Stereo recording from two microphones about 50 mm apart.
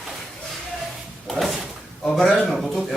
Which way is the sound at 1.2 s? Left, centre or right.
Centre.